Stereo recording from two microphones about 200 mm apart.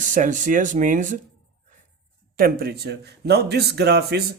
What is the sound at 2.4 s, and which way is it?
Speech, 50° right (ahead or behind).